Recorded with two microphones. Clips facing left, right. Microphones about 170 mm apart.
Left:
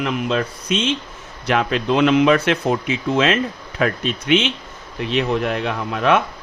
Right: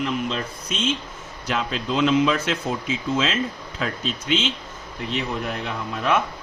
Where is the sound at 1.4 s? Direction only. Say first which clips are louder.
Left 7 dB; 65° left (ahead or behind).